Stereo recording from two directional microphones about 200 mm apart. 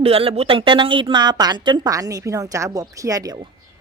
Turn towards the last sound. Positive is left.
turn(degrees=-20)  # may be behind; listen again after turning